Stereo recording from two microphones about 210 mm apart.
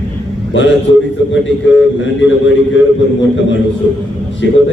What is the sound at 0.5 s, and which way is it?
Speech, 60° left (ahead or behind).